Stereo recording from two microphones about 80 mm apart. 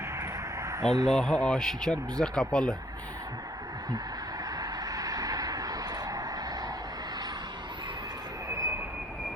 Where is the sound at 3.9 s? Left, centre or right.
Right.